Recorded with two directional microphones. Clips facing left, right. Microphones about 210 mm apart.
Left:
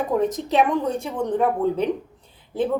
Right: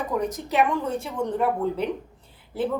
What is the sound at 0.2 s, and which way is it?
A woman's voice, 20° left (ahead or behind).